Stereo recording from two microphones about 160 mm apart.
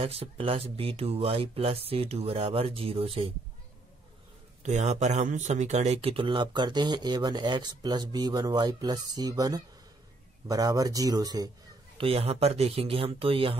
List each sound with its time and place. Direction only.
0.0 s speech: 35° right (ahead or behind)
4.6 s speech: 45° right (ahead or behind); by 11.5 s 25° right (ahead or behind)
12.0 s speech: 40° right (ahead or behind)